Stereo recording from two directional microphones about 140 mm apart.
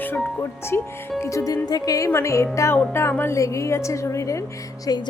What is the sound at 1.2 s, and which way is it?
Speech, 20° left (ahead or behind).